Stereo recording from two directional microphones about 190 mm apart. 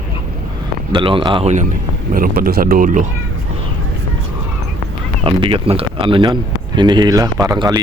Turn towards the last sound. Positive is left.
turn(degrees=-20)  # may be behind; listen again after turning